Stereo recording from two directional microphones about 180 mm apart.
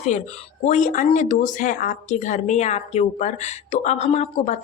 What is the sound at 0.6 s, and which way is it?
A woman's voice, 45° left (ahead or behind).